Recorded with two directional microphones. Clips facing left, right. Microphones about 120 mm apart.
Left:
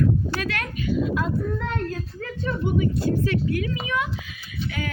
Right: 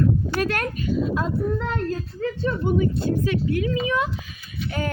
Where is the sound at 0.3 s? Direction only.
45° right (ahead or behind).